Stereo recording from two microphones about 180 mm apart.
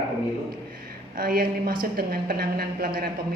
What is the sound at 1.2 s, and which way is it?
A woman's voice, 55° right (ahead or behind).